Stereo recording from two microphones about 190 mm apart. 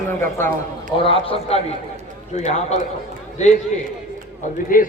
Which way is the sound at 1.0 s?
30° left (ahead or behind).